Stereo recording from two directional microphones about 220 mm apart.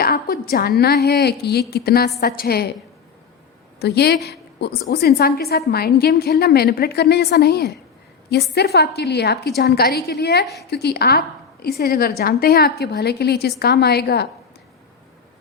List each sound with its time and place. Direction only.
0.0 s a woman's voice: 45° left (ahead or behind)
3.8 s a woman's voice: 50° left (ahead or behind)